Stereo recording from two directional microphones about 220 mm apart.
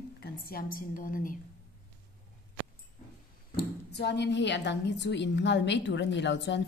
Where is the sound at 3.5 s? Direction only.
50° left (ahead or behind).